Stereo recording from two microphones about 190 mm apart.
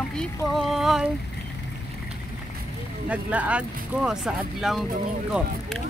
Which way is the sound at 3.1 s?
5° right (ahead or behind).